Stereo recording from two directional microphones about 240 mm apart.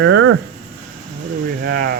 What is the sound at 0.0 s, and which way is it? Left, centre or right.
Speech, right.